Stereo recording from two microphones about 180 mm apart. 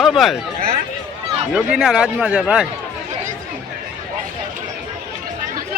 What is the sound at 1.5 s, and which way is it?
Speech, 5° right (ahead or behind).